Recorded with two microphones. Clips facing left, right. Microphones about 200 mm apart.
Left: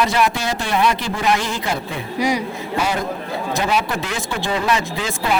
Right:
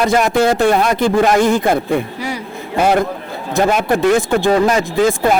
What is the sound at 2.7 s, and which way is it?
A man's voice, 55° right (ahead or behind).